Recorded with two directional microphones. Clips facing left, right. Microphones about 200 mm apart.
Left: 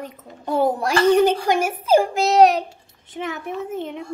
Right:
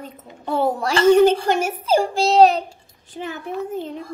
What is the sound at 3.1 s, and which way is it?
Speech, 80° left.